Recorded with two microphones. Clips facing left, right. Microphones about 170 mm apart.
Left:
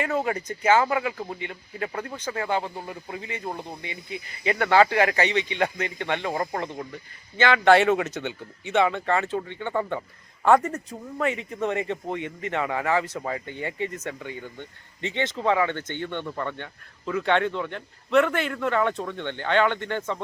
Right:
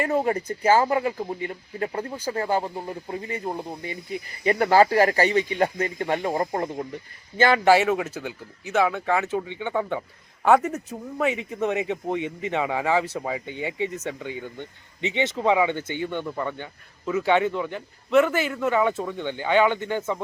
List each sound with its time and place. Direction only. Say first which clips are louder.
0.3 s speech: right 2 dB; 30° right (ahead or behind)
1.9 s speech: right 3 dB; 25° right (ahead or behind)
7.3 s speech: right 2 dB; 40° right (ahead or behind)
7.6 s a man's voice: left 1 dB; 5° right (ahead or behind)
11.2 s a man's voice: right 2 dB; 15° right (ahead or behind)